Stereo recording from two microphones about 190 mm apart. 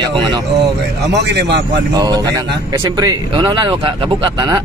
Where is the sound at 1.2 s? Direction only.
60° right (ahead or behind).